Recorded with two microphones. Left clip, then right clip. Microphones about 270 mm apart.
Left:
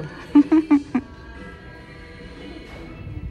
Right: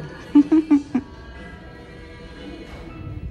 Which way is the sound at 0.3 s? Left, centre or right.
Centre.